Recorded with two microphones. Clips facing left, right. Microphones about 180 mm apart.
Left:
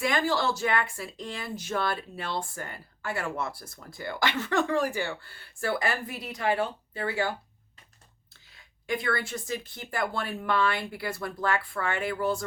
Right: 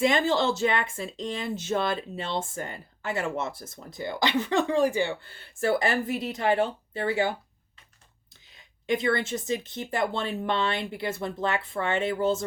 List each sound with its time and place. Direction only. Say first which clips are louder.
0.0 s speech: right 4 dB; 20° right (ahead or behind)
8.4 s speech: right 5 dB; 20° right (ahead or behind)